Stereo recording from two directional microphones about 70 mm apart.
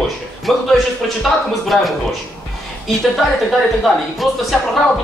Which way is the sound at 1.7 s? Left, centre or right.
Centre.